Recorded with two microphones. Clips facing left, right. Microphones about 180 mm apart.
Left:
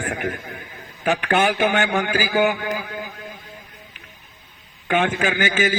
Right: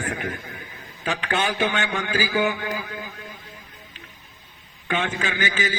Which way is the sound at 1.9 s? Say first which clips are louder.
Left 4 dB; 35° left (ahead or behind).